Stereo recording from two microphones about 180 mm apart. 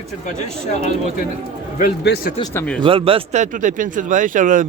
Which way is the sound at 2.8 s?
30° right (ahead or behind).